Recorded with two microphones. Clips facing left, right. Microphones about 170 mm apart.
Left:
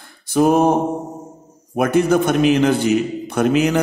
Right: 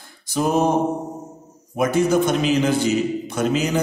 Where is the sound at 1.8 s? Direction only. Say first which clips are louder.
Left 2 dB; 55° left (ahead or behind).